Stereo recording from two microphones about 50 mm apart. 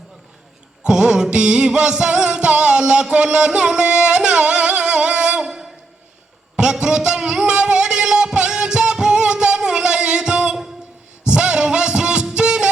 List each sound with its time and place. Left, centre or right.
0.9 s music: centre
5.4 s a sound: centre
6.6 s music: centre